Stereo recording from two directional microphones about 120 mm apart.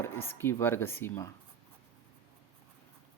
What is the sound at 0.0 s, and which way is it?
Speech, 20° left (ahead or behind).